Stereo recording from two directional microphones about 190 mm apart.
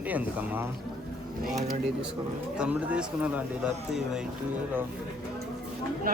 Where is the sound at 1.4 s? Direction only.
35° right (ahead or behind).